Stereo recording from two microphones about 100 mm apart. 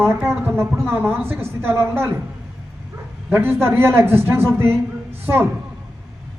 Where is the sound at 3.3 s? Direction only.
20° right (ahead or behind).